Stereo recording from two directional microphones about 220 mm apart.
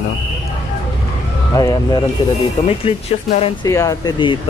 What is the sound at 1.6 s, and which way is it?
Speech, 15° left (ahead or behind).